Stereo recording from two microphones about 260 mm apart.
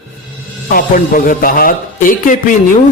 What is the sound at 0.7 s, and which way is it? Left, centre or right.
A man's voice, left.